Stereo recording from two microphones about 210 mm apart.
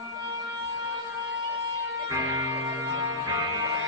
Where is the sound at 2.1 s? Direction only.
15° right (ahead or behind).